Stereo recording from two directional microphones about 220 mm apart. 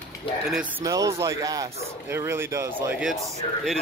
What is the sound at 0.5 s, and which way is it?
Speech, 5° right (ahead or behind).